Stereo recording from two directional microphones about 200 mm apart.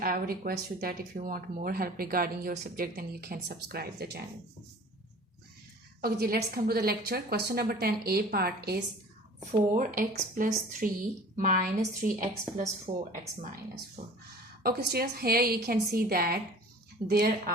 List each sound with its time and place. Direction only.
0.0 s speech: 45° right (ahead or behind)
6.0 s speech: 50° right (ahead or behind)
9.4 s speech: 40° right (ahead or behind)